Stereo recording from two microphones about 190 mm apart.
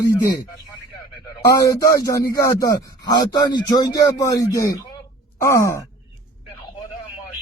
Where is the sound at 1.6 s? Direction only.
15° left (ahead or behind).